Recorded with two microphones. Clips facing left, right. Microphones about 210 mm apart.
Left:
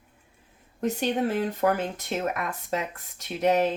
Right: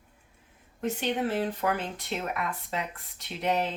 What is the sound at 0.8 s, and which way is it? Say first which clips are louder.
Speech: left 3 dB; 40° left (ahead or behind).